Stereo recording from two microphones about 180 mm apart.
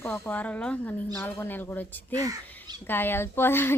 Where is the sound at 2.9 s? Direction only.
10° left (ahead or behind).